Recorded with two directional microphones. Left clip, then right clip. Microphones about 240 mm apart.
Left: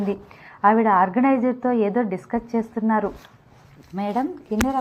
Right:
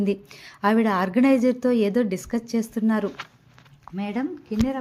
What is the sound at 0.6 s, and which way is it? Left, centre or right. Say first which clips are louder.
A woman's voice: left 5 dB; right.